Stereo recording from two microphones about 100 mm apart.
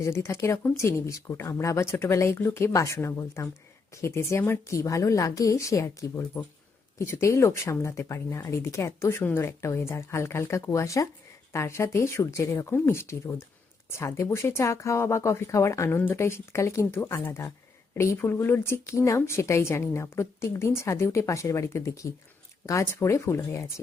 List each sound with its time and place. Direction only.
0.0 s speech: 30° left (ahead or behind)